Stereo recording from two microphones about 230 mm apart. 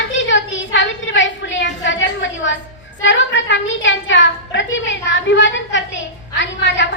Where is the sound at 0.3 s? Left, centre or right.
Left.